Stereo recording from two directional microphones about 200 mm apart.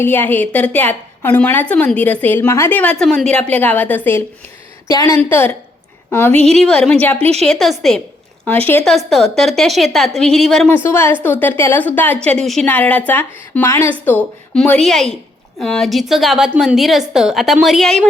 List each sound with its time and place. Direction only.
0.0 s a woman's voice: 10° left (ahead or behind)
7.2 s a woman's voice: 30° right (ahead or behind)
7.4 s a woman's voice: centre (ahead or behind)
10.8 s a woman's voice: 10° left (ahead or behind)